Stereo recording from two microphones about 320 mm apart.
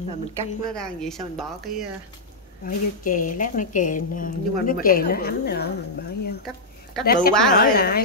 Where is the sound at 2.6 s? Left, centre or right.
Left.